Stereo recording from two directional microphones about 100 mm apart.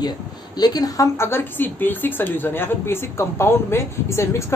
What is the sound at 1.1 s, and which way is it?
Speech, 25° left (ahead or behind).